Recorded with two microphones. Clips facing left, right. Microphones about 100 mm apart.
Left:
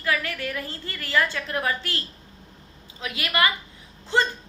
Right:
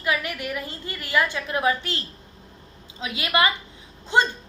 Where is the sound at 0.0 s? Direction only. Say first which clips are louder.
Even; 20° right (ahead or behind).